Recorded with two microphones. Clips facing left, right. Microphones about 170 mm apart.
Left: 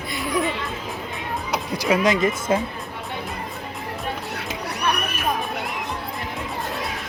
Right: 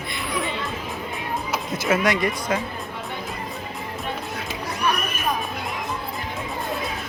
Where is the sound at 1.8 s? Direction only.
15° left (ahead or behind).